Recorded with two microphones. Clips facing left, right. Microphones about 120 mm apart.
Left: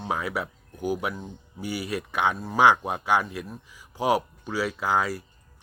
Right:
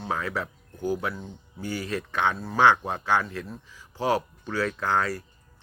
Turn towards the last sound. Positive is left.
turn(degrees=10)  # may be behind; listen again after turning